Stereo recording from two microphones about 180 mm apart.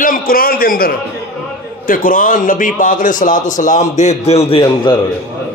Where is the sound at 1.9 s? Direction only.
50° left (ahead or behind).